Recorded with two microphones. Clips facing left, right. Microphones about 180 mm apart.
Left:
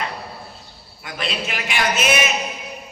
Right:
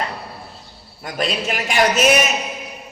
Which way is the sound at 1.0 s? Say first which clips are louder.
Right 5 dB; 40° right (ahead or behind).